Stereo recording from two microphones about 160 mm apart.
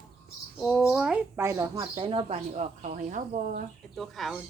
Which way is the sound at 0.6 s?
Centre (ahead or behind).